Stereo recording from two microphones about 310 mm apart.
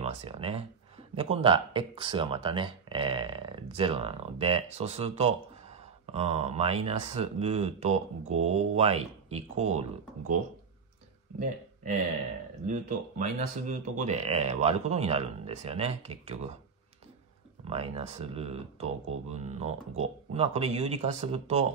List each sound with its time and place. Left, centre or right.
0.0 s speech: centre
12.6 s speech: right
17.6 s speech: centre